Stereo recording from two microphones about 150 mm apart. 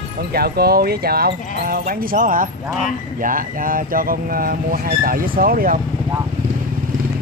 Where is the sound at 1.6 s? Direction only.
80° right.